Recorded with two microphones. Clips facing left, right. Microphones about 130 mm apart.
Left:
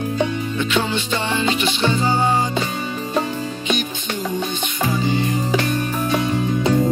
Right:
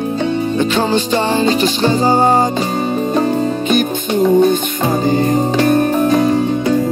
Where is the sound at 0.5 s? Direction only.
35° right (ahead or behind).